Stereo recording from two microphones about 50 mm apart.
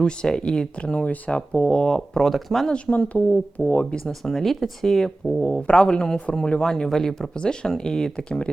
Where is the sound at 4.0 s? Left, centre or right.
Centre.